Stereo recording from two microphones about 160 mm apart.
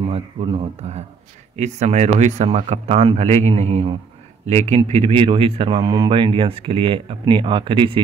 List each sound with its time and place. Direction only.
0.0 s speech: 35° right (ahead or behind)